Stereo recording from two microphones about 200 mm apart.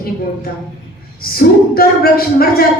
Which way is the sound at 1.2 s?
50° left (ahead or behind).